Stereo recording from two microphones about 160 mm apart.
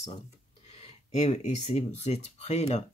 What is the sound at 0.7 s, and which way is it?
Speech, 40° left (ahead or behind).